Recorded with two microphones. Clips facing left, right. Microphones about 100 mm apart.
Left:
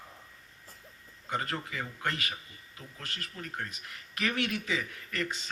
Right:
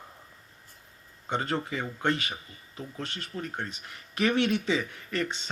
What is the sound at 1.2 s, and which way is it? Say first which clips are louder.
Speech: right 5 dB; 25° right (ahead or behind).